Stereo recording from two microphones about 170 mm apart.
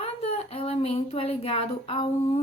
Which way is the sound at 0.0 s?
35° left (ahead or behind).